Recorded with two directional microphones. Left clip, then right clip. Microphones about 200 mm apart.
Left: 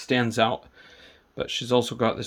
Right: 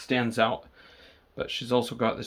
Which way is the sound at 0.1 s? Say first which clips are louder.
Left 2 dB; 40° left (ahead or behind).